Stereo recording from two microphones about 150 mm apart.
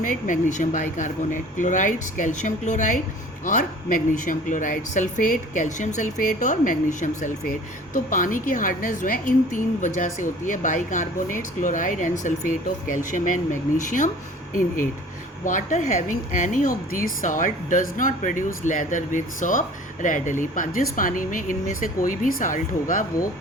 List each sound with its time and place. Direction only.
0.0 s speech: 55° left (ahead or behind)
15.4 s speech: 55° left (ahead or behind)